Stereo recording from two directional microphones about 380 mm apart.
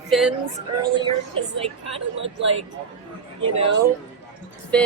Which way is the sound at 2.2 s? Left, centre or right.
Right.